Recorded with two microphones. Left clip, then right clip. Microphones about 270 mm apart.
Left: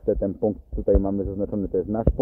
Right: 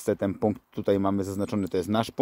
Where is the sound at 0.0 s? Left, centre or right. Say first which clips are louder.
Left 3 dB; right.